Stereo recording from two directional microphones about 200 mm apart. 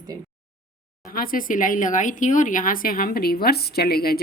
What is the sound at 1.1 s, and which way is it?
Speech, 45° left (ahead or behind).